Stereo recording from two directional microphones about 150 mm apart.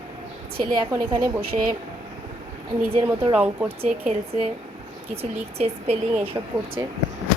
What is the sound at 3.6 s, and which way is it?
Speech, 40° right (ahead or behind).